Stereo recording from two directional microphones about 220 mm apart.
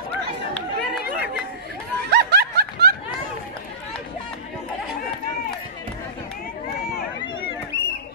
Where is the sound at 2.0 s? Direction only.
50° right (ahead or behind).